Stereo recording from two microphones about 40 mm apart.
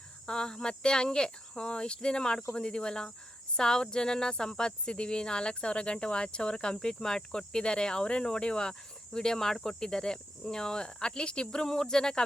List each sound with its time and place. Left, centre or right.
0.3 s speech: centre